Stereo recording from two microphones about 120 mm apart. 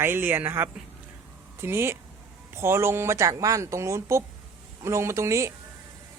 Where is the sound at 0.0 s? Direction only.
20° right (ahead or behind).